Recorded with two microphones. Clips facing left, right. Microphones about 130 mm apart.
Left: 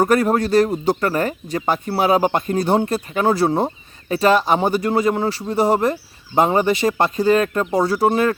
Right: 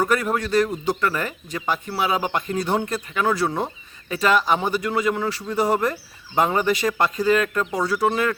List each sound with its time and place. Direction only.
0.0 s speech: 40° left (ahead or behind)